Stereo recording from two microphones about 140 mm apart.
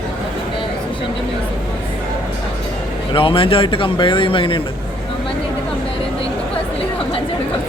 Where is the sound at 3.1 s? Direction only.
40° left (ahead or behind).